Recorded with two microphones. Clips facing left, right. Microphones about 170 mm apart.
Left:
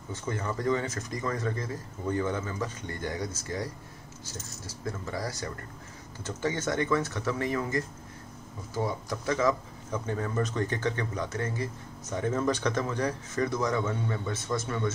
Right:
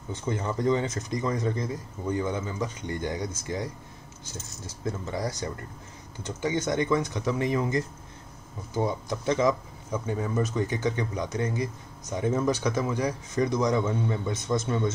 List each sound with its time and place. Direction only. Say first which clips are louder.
0.1 s speech: right 3 dB; 20° right (ahead or behind)